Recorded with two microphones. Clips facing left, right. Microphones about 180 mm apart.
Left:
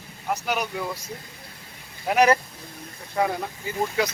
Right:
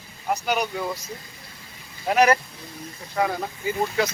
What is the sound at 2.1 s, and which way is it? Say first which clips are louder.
Speech: even; 20° left (ahead or behind).